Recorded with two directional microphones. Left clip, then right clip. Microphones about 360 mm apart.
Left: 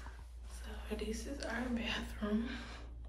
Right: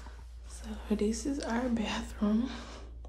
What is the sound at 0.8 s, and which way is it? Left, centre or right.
Speech, centre.